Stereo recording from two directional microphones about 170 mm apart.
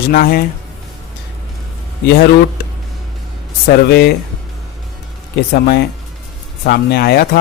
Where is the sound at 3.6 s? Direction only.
70° left (ahead or behind).